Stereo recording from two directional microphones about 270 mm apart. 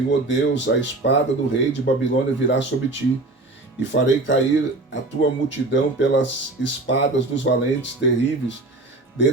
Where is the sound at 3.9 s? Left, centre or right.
Left.